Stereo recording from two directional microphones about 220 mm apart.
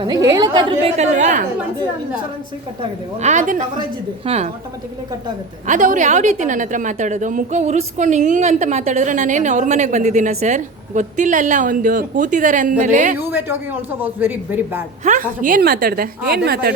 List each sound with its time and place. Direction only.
0.0 s a woman's voice: 15° right (ahead or behind)
0.9 s a woman's voice: 35° right (ahead or behind)
3.2 s a woman's voice: 35° right (ahead or behind)
5.6 s a woman's voice: 35° right (ahead or behind)
13.1 s a man's voice: 10° right (ahead or behind)
15.0 s a woman's voice: 35° right (ahead or behind)